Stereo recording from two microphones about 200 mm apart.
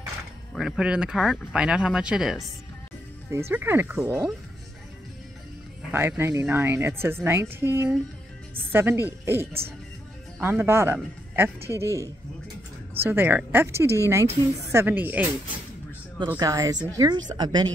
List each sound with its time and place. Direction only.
0.6 s speech: 5° right (ahead or behind)
3.3 s a woman's voice: 15° right (ahead or behind)
5.9 s a woman's voice: 10° right (ahead or behind)
16.3 s a woman's voice: 15° right (ahead or behind)